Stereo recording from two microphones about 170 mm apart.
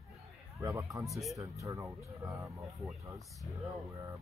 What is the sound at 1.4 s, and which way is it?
Speech, 20° right (ahead or behind).